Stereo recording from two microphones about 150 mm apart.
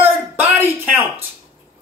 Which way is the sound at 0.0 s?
15° right (ahead or behind).